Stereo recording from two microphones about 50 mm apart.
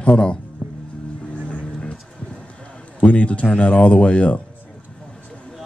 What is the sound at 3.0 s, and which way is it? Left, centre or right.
Speech, left.